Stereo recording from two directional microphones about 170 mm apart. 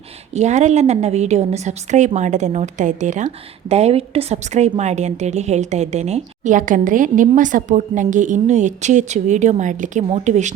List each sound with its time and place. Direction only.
0.3 s a woman's voice: 45° right (ahead or behind)